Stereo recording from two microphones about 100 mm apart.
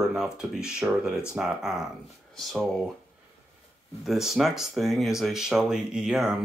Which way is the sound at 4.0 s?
Centre (ahead or behind).